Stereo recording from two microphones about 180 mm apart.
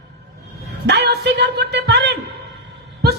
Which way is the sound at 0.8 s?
70° right (ahead or behind).